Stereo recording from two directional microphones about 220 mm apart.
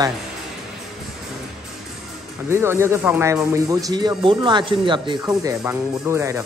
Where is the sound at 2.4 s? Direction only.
10° right (ahead or behind).